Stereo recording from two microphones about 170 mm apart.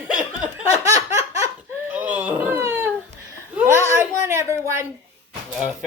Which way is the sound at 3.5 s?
15° right (ahead or behind).